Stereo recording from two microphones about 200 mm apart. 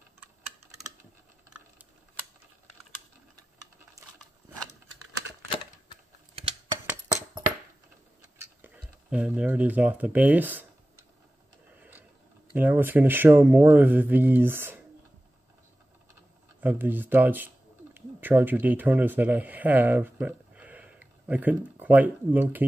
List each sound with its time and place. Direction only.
4.0 s patter: 15° right (ahead or behind)
6.3 s a sound: 30° right (ahead or behind)
8.7 s speech: 5° right (ahead or behind)
12.5 s speech: 10° right (ahead or behind)
16.6 s speech: 10° right (ahead or behind)